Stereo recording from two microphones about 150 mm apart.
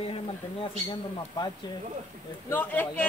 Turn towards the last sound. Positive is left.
turn(degrees=10)  # may be behind; listen again after turning